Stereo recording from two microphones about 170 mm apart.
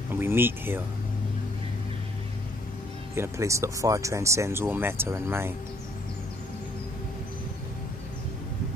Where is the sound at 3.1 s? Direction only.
15° right (ahead or behind).